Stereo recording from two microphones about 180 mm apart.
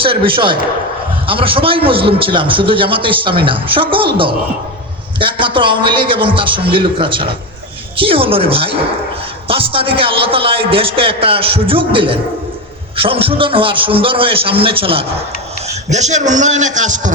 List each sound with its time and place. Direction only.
0.0 s a man's voice: 30° right (ahead or behind)